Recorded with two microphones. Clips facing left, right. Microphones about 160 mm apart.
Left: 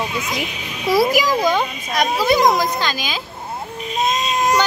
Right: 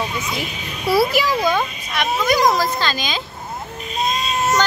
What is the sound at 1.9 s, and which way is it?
A child's voice, 30° left (ahead or behind).